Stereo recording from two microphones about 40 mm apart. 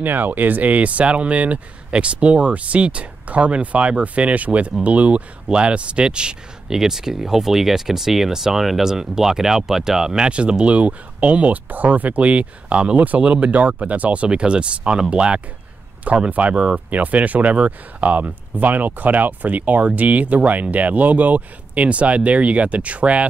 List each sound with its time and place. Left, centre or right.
0.0 s speech: right
6.7 s speech: centre
10.2 s speech: right
16.3 s speech: right
16.5 s speech: right
16.9 s speech: right